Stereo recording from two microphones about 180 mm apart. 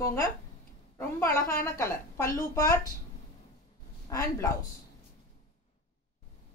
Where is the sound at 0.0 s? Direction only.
15° left (ahead or behind).